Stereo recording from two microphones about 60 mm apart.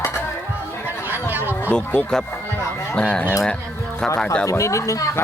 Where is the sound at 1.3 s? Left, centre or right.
Right.